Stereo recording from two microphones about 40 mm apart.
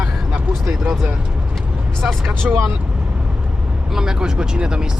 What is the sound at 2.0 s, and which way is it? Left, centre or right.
Speech, centre.